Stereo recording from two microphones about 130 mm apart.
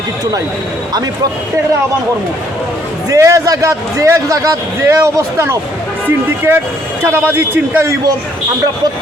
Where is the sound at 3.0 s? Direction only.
25° right (ahead or behind).